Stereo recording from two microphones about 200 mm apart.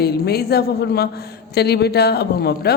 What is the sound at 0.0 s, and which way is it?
A man's voice, 50° left (ahead or behind).